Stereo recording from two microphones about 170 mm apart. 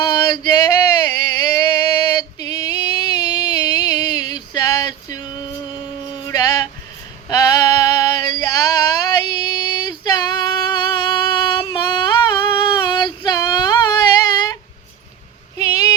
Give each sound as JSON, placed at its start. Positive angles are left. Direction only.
{"t": 0.0, "sound": "female singing", "side_deg": 25}
{"t": 3.5, "sound": "a sound", "side_deg": 25}
{"t": 6.2, "sound": "music", "side_deg": 20}
{"t": 7.3, "sound": "female singing", "side_deg": 20}